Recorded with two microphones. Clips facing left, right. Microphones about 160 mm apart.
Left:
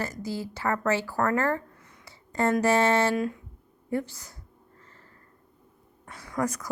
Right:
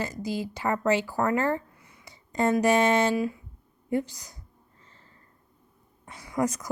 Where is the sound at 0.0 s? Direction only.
15° right (ahead or behind).